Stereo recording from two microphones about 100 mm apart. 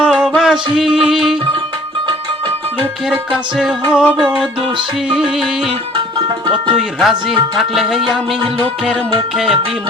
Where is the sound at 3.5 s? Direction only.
5° right (ahead or behind).